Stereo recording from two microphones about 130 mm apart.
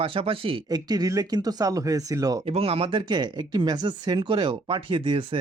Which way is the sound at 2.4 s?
45° right (ahead or behind).